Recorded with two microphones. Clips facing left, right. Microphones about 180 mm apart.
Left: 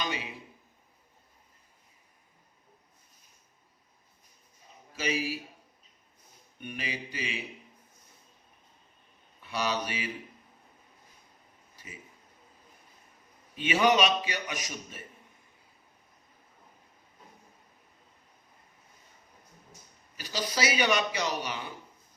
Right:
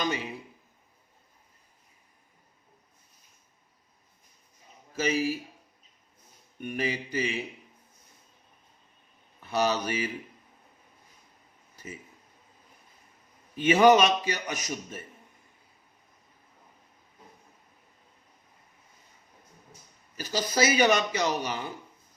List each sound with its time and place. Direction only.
4.9 s a man's voice: 45° right (ahead or behind)
6.6 s a man's voice: 45° right (ahead or behind)
9.4 s a man's voice: 45° right (ahead or behind)
13.6 s a man's voice: 45° right (ahead or behind)
20.1 s a man's voice: 45° right (ahead or behind)